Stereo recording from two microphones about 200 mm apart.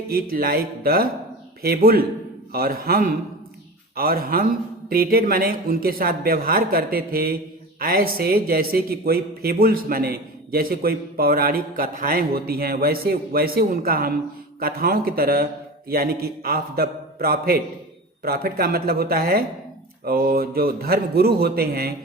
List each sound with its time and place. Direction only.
0.1 s a man's voice: 45° right (ahead or behind)